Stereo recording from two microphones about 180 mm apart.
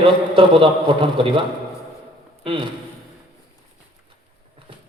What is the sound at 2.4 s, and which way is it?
Speech, 30° right (ahead or behind).